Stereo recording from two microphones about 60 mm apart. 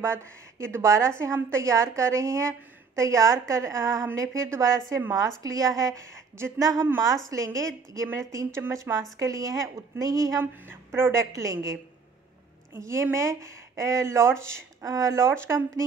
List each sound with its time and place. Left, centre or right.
0.0 s a woman's voice: right
5.4 s a woman's voice: right
6.0 s a woman's voice: right
6.6 s a woman's voice: right
7.2 s a woman's voice: right
8.9 s a woman's voice: right
9.2 s a woman's voice: right
11.0 s a woman's voice: right
12.7 s a woman's voice: right